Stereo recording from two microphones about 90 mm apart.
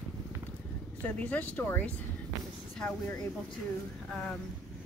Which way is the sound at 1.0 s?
15° left (ahead or behind).